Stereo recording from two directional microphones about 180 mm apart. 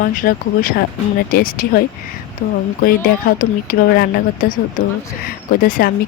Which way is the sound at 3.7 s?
55° left (ahead or behind).